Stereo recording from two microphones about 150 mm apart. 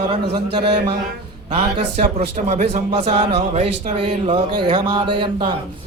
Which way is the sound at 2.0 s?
55° right (ahead or behind).